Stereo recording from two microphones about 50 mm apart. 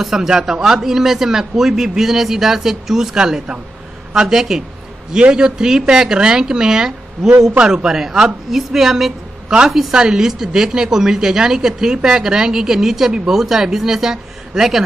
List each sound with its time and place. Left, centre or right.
0.0 s a woman's voice: centre
7.2 s a man's voice: right
7.6 s a woman's voice: centre